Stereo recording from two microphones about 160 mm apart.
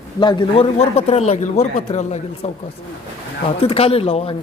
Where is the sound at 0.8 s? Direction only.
40° left (ahead or behind).